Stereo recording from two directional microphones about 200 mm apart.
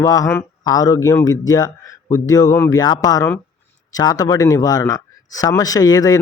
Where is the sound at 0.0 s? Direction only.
15° left (ahead or behind).